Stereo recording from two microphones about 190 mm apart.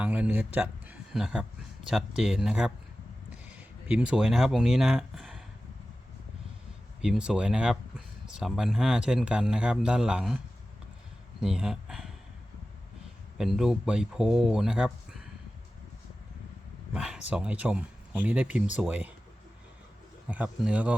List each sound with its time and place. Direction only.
0.0 s speech: 10° right (ahead or behind)
3.8 s speech: 5° right (ahead or behind)
7.0 s speech: 5° right (ahead or behind)
11.3 s a sound: 5° right (ahead or behind)
13.4 s speech: centre (ahead or behind)
16.9 s speech: 5° right (ahead or behind)
20.3 s speech: 5° right (ahead or behind)